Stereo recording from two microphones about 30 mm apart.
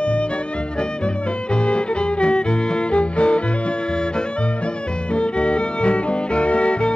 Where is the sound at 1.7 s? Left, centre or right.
Left.